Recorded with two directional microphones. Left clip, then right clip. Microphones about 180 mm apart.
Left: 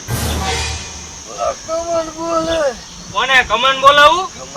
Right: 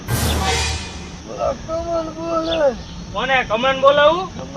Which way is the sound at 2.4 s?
55° left (ahead or behind).